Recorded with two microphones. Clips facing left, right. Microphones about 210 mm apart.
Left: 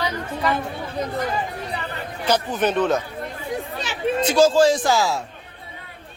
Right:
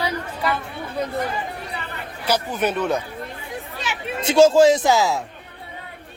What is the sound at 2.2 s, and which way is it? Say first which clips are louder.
Speech: left 1 dB; 10° right (ahead or behind).